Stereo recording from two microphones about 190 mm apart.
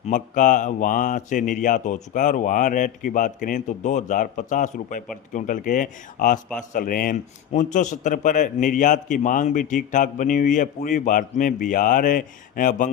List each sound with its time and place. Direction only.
0.1 s a man's voice: 45° left (ahead or behind)